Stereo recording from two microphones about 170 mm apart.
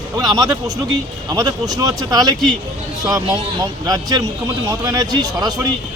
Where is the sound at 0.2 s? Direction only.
20° right (ahead or behind).